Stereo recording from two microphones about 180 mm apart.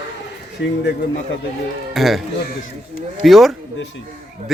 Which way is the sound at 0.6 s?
80° left.